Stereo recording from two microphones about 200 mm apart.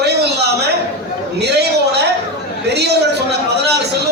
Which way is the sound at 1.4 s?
55° right (ahead or behind).